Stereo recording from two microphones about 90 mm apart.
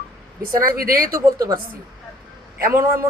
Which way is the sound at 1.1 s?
40° right (ahead or behind).